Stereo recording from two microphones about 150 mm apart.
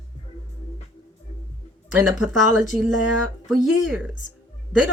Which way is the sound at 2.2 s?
5° right (ahead or behind).